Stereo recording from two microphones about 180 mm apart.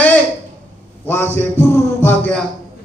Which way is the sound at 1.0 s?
10° left (ahead or behind).